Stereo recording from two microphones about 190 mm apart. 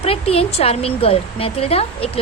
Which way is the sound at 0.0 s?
30° left (ahead or behind).